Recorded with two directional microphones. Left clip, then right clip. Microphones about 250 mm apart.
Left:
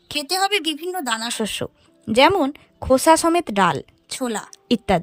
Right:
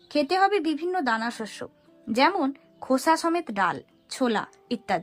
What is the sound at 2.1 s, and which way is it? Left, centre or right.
Speech, left.